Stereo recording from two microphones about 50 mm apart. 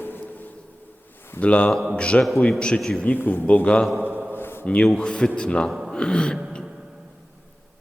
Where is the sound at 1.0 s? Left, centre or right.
Left.